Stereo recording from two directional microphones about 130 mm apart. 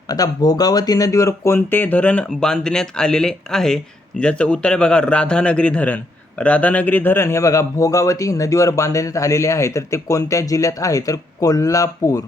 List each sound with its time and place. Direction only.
0.1 s a man's voice: 30° left (ahead or behind)